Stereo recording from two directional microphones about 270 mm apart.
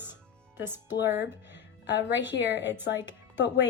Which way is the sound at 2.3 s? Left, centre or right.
Left.